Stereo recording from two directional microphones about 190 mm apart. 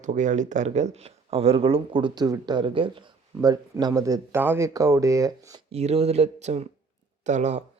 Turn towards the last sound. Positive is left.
turn(degrees=-35)  # may be behind; listen again after turning